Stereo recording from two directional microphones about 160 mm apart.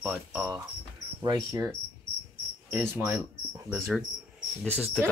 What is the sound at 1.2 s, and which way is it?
Speech, 25° right (ahead or behind).